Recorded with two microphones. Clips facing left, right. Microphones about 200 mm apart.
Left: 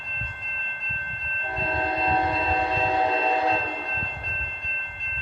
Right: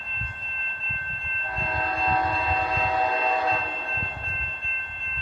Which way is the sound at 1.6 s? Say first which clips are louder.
Left 2 dB; 25° left (ahead or behind).